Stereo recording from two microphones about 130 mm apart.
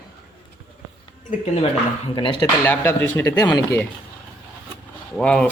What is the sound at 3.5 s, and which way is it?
Speech, 25° left (ahead or behind).